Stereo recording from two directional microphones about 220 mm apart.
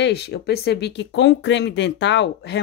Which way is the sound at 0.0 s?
50° left (ahead or behind).